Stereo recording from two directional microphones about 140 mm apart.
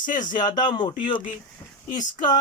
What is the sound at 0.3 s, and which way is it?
Speech, 30° left (ahead or behind).